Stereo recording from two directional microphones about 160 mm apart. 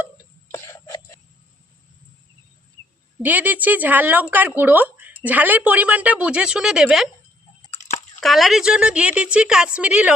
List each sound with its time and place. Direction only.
0.5 s throat clearing: 20° left (ahead or behind)
3.2 s speech: 10° right (ahead or behind)
8.2 s speech: centre (ahead or behind)